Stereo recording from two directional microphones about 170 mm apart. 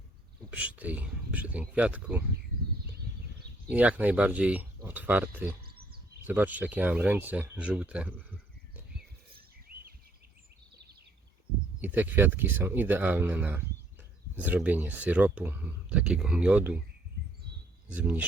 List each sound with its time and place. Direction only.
0.5 s speech: 10° right (ahead or behind)
3.7 s speech: 10° right (ahead or behind)
5.6 s a sound: 65° right (ahead or behind)
6.2 s speech: 10° right (ahead or behind)
11.8 s speech: 10° right (ahead or behind)
17.8 s speech: 10° right (ahead or behind)